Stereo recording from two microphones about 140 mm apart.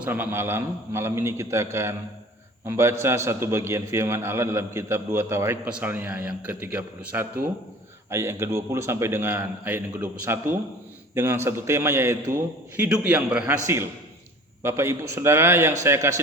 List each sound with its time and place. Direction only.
0.0 s a man's voice: 15° right (ahead or behind)
13.5 s a man's voice: 20° right (ahead or behind)